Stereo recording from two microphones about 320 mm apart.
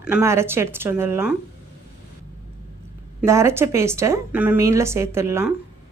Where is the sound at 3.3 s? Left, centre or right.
Centre.